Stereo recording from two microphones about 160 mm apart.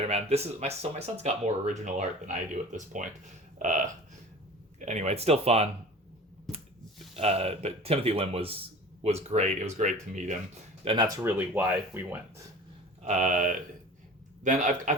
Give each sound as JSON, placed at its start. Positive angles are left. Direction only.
{"t": 0.0, "sound": "speech", "side_deg": -40}
{"t": 7.1, "sound": "speech", "side_deg": -40}
{"t": 10.8, "sound": "speech", "side_deg": -30}
{"t": 11.2, "sound": "speech", "side_deg": -10}
{"t": 13.0, "sound": "speech", "side_deg": -50}